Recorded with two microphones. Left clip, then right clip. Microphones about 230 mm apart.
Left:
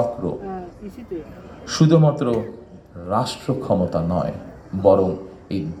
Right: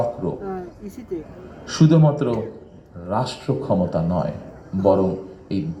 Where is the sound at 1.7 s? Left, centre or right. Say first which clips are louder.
Left 1 dB; left.